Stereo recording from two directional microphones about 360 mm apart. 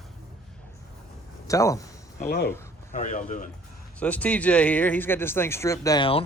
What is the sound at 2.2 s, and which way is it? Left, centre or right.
A man's voice, left.